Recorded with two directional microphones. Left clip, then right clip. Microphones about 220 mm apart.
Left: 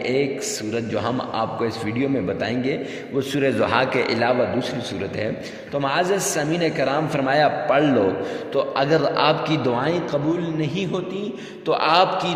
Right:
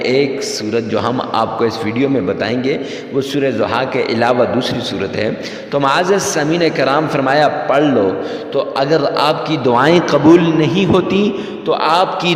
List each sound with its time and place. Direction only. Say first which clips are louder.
0.0 s a man's voice: right 8 dB; 30° right (ahead or behind)
5.7 s a man's voice: right 8 dB; 30° right (ahead or behind)
9.7 s a man's voice: right 11 dB; 35° right (ahead or behind)
11.7 s a man's voice: right 4 dB; 20° right (ahead or behind)